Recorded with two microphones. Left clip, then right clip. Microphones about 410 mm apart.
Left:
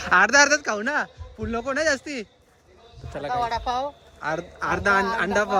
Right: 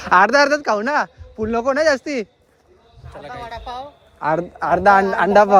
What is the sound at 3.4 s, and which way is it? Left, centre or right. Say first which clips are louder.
Speech: left 3 dB; left.